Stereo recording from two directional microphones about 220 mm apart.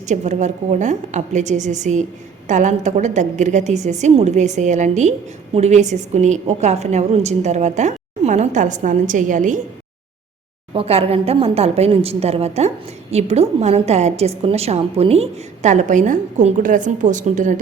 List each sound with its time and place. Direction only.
0.1 s a woman's voice: 35° right (ahead or behind)
10.8 s a woman's voice: 25° right (ahead or behind)